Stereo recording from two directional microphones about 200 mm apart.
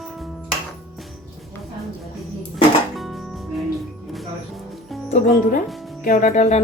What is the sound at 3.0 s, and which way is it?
Music, centre (ahead or behind).